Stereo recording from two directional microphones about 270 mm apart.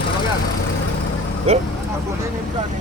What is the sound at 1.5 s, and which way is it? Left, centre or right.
Speech, right.